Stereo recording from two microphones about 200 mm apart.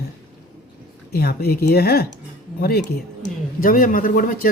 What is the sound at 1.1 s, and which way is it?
Speech, 50° left (ahead or behind).